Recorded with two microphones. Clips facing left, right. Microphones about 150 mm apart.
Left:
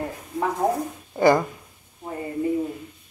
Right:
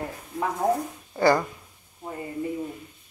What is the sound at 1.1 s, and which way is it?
Speech, 20° left (ahead or behind).